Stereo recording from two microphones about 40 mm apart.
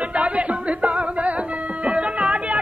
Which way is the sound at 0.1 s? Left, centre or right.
Right.